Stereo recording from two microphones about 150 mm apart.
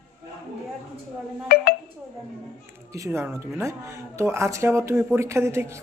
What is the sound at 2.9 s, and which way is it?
Speech, 20° right (ahead or behind).